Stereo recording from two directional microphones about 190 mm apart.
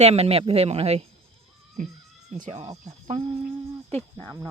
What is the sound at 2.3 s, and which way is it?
Speech, 35° right (ahead or behind).